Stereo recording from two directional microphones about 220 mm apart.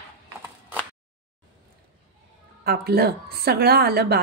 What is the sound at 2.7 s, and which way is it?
A woman's voice, 45° right (ahead or behind).